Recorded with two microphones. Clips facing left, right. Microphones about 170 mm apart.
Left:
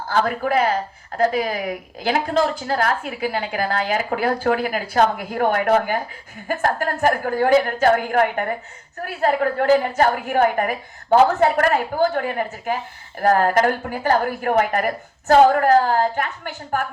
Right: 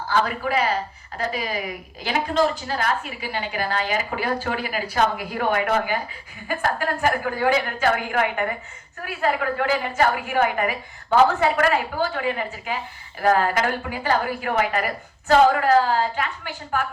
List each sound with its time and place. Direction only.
0.1 s a woman's voice: 55° left (ahead or behind)